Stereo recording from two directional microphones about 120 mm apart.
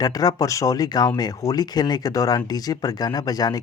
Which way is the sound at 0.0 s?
30° left (ahead or behind).